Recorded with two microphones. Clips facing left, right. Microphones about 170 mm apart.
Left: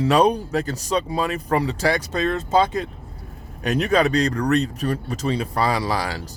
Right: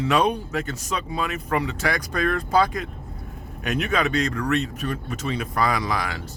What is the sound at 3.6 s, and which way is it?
A man's voice, 35° left (ahead or behind).